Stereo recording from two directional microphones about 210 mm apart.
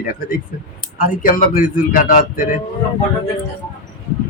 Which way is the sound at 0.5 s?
45° left (ahead or behind).